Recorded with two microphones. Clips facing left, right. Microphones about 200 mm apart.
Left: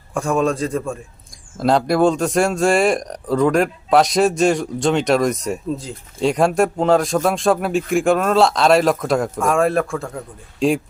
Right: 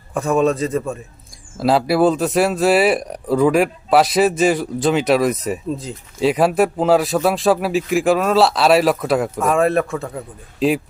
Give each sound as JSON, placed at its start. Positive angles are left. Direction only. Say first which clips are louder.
{"t": 0.1, "sound": "a man's voice", "louder": "right 2 dB", "side_deg": -5}